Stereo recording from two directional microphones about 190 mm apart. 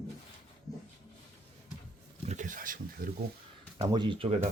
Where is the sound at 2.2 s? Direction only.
40° right (ahead or behind).